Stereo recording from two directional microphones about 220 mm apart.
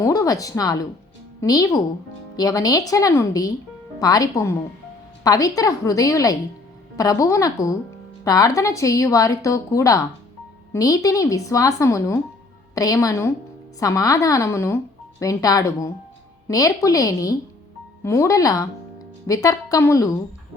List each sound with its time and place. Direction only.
0.0 s a woman's voice: 15° left (ahead or behind)